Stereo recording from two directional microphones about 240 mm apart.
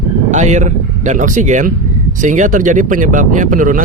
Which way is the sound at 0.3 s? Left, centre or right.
Right.